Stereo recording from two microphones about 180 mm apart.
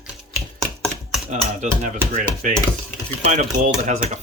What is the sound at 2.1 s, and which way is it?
Cutlery, 45° right (ahead or behind).